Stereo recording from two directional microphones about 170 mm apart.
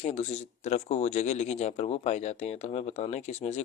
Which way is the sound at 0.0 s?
40° left (ahead or behind).